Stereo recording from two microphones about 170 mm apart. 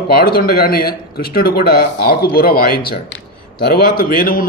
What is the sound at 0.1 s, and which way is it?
A man's voice, 65° left (ahead or behind).